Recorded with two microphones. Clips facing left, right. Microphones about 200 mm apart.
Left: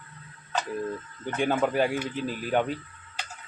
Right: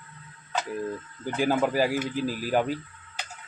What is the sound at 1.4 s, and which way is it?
Speech, centre (ahead or behind).